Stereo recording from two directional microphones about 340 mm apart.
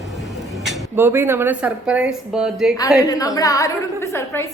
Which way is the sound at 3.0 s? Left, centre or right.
Centre.